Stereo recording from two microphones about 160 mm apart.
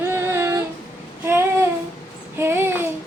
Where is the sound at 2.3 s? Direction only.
15° right (ahead or behind).